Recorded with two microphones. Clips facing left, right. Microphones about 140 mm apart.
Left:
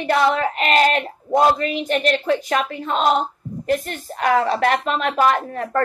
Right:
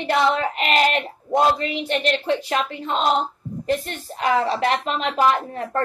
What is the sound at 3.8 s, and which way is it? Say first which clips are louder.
Speech: left 2 dB; 40° left (ahead or behind).